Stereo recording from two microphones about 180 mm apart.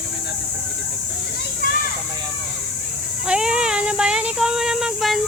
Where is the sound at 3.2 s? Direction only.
5° right (ahead or behind).